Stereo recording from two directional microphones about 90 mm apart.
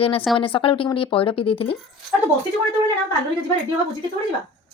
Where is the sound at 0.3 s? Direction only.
85° left.